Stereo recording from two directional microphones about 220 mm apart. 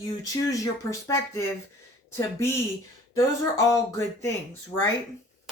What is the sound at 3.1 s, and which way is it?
Speech, 15° left (ahead or behind).